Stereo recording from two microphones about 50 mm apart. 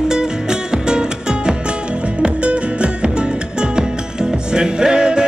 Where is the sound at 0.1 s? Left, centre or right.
Centre.